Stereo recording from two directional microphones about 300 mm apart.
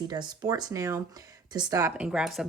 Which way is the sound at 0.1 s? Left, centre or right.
Centre.